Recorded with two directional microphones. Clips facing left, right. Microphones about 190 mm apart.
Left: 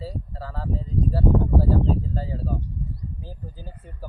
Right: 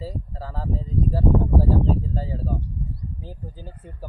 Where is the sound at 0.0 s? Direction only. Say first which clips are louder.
Right 1 dB; 15° right (ahead or behind).